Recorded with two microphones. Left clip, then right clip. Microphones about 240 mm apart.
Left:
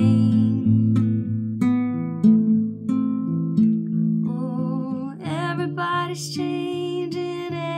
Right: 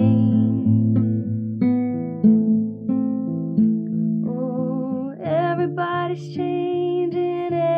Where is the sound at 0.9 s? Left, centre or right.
Centre.